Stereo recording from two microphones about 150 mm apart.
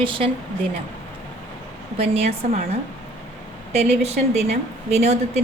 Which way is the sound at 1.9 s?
40° right (ahead or behind).